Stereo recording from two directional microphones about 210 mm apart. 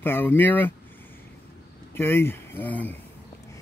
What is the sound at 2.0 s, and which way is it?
Speech, 10° left (ahead or behind).